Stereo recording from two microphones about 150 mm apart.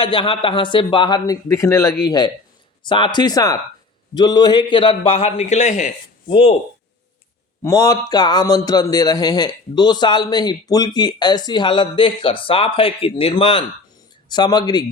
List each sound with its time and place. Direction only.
0.0 s speech: 35° left (ahead or behind); by 5.9 s 50° left (ahead or behind)
6.2 s speech: 40° left (ahead or behind)
7.6 s speech: 25° left (ahead or behind)